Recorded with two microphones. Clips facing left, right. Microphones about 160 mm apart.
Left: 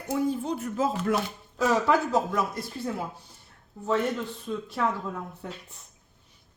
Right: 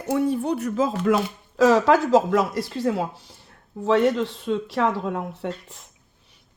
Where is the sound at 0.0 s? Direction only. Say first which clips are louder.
Right 5 dB; 70° right (ahead or behind).